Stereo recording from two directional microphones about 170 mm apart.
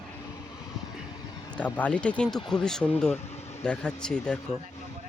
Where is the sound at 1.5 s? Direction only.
10° left (ahead or behind).